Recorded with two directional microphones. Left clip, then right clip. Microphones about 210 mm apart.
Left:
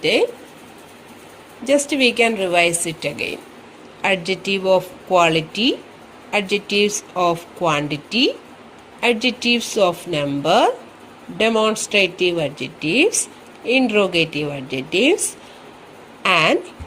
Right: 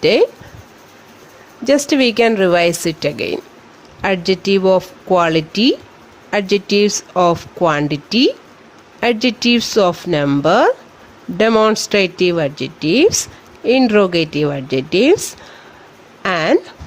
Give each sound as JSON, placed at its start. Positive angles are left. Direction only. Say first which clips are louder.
{"t": 0.0, "sound": "speech", "louder": "right 5 dB", "side_deg": -30}
{"t": 1.6, "sound": "speech", "louder": "right 3 dB", "side_deg": -30}
{"t": 16.2, "sound": "a sound", "louder": "right 1 dB", "side_deg": -25}